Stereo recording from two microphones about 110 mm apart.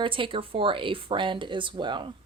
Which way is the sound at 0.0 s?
50° right (ahead or behind).